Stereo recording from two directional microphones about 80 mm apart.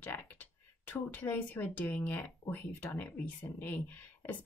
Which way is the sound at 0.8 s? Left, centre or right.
Left.